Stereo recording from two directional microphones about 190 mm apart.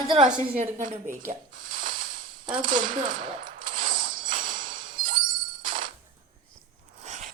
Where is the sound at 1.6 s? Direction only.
45° right (ahead or behind).